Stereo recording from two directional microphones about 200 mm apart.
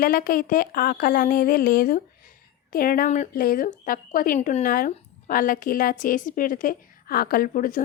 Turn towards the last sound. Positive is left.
turn(degrees=45)  # may be behind; listen again after turning